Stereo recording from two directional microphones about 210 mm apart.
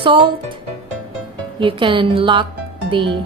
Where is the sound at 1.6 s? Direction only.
25° right (ahead or behind).